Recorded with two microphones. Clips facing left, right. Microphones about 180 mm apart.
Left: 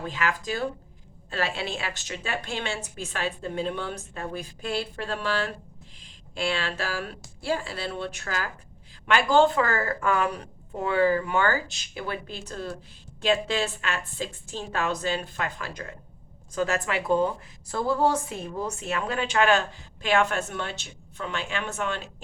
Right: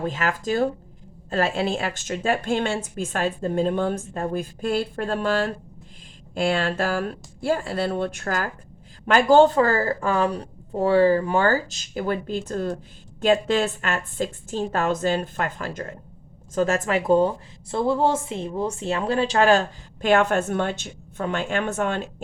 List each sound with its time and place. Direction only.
0.0 s speech: 45° right (ahead or behind)
20.1 s speech: 55° right (ahead or behind)